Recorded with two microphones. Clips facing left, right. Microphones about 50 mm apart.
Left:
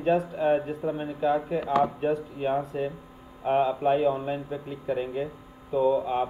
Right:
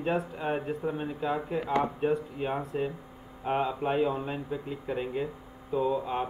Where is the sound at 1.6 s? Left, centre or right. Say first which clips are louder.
Left 2 dB; left.